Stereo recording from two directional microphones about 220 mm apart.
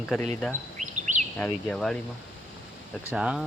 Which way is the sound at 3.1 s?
5° right (ahead or behind).